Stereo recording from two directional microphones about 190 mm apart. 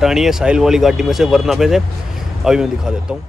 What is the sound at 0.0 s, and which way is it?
Speech, centre (ahead or behind).